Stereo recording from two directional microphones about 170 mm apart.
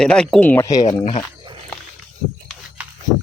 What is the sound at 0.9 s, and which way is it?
Speech, 35° left (ahead or behind).